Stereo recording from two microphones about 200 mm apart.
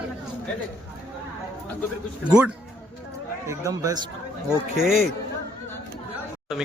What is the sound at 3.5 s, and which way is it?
Speech, 15° right (ahead or behind).